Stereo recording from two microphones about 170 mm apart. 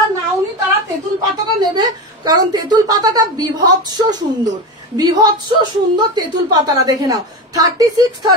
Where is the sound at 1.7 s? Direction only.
25° right (ahead or behind).